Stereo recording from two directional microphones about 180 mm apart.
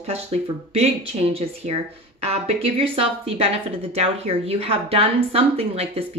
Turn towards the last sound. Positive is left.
turn(degrees=-35)  # may be behind; listen again after turning